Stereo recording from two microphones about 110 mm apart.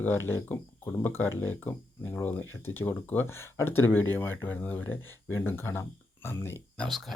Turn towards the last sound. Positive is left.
turn(degrees=0)  # may be behind; listen again after turning